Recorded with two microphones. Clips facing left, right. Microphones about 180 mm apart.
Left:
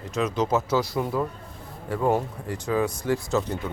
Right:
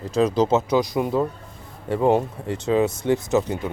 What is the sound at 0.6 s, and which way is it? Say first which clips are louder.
Speech: right 4 dB; 15° right (ahead or behind).